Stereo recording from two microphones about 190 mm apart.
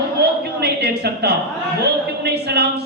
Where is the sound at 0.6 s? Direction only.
55° right (ahead or behind).